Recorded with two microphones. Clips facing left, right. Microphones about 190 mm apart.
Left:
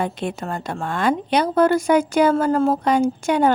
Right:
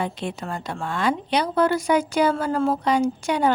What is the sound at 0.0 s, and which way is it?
A woman's voice, 50° left (ahead or behind).